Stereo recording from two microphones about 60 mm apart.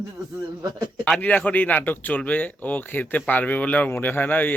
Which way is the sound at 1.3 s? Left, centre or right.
Left.